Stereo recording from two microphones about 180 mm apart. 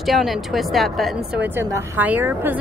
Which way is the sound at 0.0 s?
Centre (ahead or behind).